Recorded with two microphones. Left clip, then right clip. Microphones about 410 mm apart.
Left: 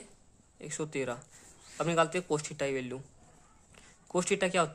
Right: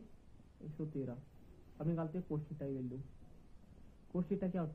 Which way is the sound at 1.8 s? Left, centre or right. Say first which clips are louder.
Left 14 dB; left.